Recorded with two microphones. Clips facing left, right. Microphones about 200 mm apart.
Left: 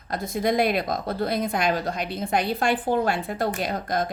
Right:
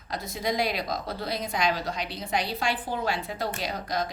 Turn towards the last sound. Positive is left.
turn(degrees=55)  # may be behind; listen again after turning